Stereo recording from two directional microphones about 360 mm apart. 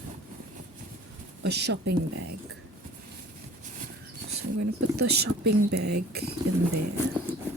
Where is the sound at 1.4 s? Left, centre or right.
Right.